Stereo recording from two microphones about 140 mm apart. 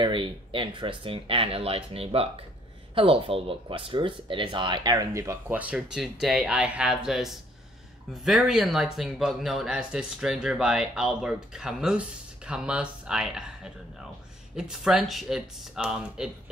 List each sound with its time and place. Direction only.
0.0 s speech: 35° right (ahead or behind)
5.6 s speech: 5° right (ahead or behind)
14.5 s speech: 5° right (ahead or behind)